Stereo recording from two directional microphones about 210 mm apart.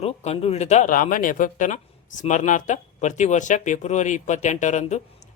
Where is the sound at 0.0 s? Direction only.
30° left (ahead or behind).